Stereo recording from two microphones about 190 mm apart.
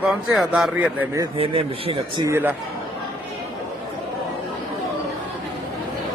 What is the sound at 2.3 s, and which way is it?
Speech, 10° right (ahead or behind).